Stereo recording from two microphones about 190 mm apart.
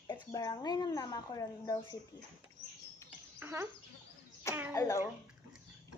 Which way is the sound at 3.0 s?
10° right (ahead or behind).